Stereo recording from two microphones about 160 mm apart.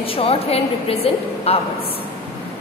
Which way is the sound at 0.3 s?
35° left (ahead or behind).